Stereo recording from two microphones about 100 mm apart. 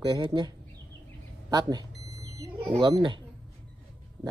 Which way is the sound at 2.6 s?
55° right (ahead or behind).